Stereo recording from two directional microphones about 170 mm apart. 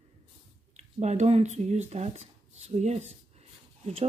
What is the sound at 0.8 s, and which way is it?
Speech, 40° right (ahead or behind).